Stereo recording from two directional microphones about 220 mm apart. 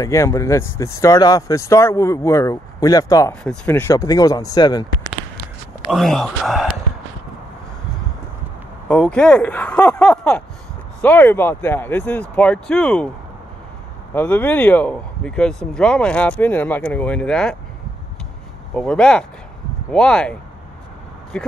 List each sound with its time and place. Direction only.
0.0 s speech: 15° left (ahead or behind)
5.9 s speech: centre (ahead or behind)
8.8 s speech: 5° left (ahead or behind)
14.1 s speech: 10° left (ahead or behind)
18.8 s speech: 5° left (ahead or behind)